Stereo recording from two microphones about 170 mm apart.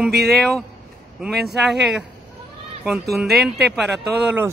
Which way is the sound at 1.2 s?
Centre (ahead or behind).